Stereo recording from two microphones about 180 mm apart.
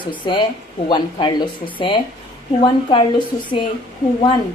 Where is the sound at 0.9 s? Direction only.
25° left (ahead or behind).